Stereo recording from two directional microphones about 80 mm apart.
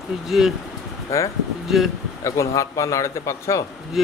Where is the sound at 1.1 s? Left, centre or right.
Left.